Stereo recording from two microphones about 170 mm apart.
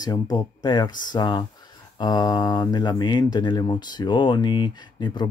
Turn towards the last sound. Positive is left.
turn(degrees=25)  # may be behind; listen again after turning